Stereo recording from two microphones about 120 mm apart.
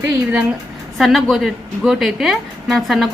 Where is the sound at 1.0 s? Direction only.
Centre (ahead or behind).